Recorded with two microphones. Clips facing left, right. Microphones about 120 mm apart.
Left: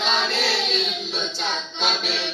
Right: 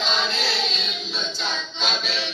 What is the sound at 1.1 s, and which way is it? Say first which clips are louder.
A capella: left 2 dB; 60° left (ahead or behind).